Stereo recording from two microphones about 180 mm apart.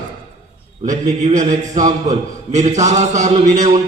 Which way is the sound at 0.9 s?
40° right (ahead or behind).